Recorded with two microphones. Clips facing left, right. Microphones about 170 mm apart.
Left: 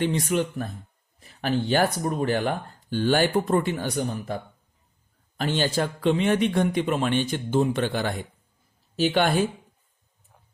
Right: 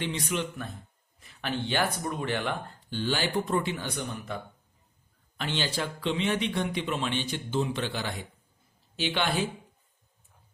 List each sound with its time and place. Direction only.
0.0 s speech: 50° left (ahead or behind)
5.4 s speech: 45° left (ahead or behind)